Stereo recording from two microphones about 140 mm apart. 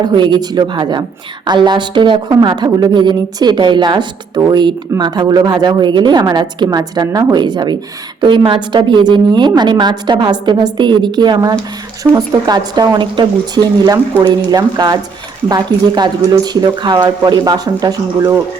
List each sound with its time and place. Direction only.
0.0 s a woman's voice: 35° right (ahead or behind)
14.1 s speech: 10° left (ahead or behind)
14.5 s a woman's voice: 30° right (ahead or behind)
18.2 s speech: 15° right (ahead or behind)